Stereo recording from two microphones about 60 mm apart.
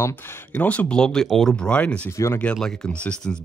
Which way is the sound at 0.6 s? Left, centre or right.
Left.